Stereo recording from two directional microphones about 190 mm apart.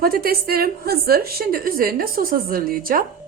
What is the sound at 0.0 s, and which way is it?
A woman's voice, 50° right (ahead or behind).